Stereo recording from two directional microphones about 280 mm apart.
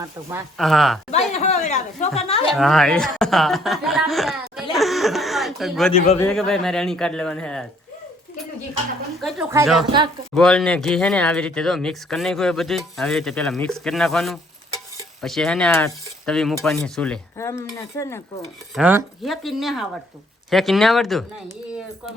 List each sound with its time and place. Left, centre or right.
0.0 s speech: centre
1.1 s a woman's voice: left
2.5 s speech: centre
9.2 s speech: centre
18.7 s speech: centre